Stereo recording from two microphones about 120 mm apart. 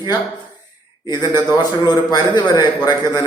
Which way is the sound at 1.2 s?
20° right (ahead or behind).